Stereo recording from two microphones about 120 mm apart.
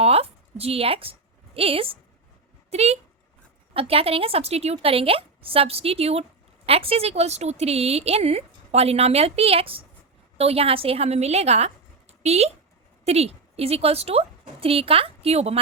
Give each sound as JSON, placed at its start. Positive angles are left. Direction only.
{"t": 0.0, "sound": "a woman's voice", "side_deg": -55}